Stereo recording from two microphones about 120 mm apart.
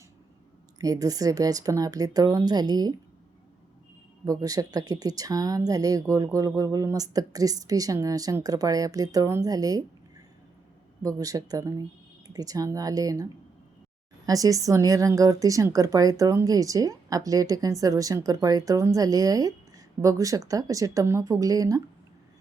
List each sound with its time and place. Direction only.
0.8 s a woman's voice: 30° right (ahead or behind)
4.3 s a woman's voice: 30° right (ahead or behind)
11.0 s a woman's voice: 30° right (ahead or behind)
14.3 s a woman's voice: 30° right (ahead or behind)